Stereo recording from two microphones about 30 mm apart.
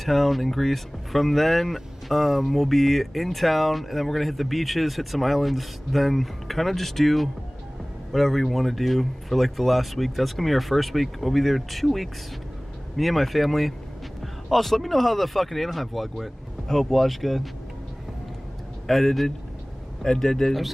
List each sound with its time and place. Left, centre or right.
0.0 s speech: centre
18.9 s a man's voice: centre